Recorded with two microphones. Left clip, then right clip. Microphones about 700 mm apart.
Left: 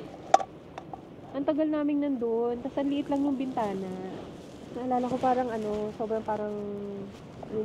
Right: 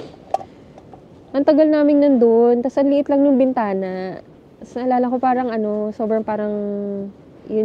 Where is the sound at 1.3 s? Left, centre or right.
Right.